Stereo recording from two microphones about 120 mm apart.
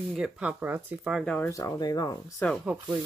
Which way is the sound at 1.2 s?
5° left (ahead or behind).